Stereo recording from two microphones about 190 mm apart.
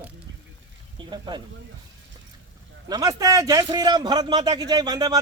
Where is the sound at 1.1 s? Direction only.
25° right (ahead or behind).